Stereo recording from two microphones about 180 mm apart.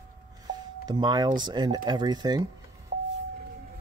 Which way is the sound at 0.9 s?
25° right (ahead or behind).